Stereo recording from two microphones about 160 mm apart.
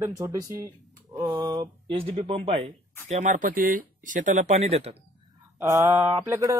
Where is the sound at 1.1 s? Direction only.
15° right (ahead or behind).